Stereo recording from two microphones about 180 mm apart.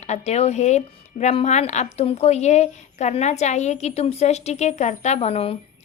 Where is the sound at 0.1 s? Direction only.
35° left (ahead or behind).